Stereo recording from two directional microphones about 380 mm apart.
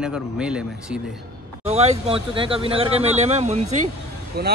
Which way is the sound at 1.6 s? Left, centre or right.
Centre.